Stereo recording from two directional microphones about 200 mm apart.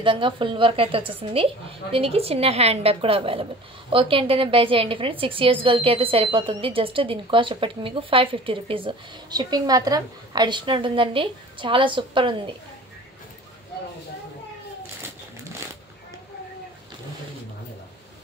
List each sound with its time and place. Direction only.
0.0 s a woman's voice: 25° right (ahead or behind)